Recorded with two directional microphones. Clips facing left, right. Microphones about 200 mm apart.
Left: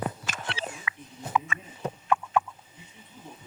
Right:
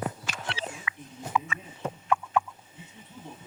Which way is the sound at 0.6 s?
50° left (ahead or behind).